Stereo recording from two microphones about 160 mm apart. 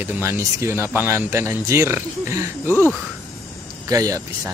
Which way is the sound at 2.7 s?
15° left (ahead or behind).